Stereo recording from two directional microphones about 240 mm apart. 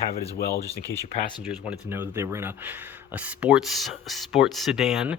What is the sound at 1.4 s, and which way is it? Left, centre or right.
Speech, centre.